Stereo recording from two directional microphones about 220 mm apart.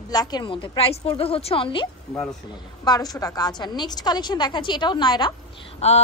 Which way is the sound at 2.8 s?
15° left (ahead or behind).